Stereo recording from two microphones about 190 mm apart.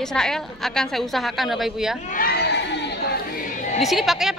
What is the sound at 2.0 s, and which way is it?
Chatter, 50° left (ahead or behind).